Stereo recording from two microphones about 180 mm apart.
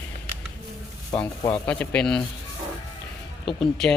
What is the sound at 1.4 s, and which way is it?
Speech, 20° left (ahead or behind).